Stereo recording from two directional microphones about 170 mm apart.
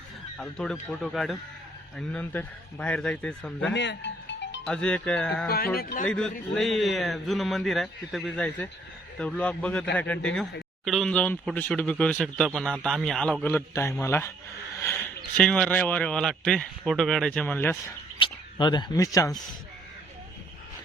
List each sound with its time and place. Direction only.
0.3 s a man's voice: 5° left (ahead or behind)
3.7 s music: 90° left
4.6 s a man's voice: 5° left (ahead or behind)
5.7 s a man's voice: 60° left (ahead or behind)
6.1 s a man's voice: 5° left (ahead or behind)
15.4 s speech: 5° left (ahead or behind)
18.2 s speech: 25° left (ahead or behind)